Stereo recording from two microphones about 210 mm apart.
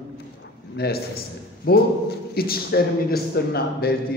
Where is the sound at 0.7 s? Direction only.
50° left (ahead or behind).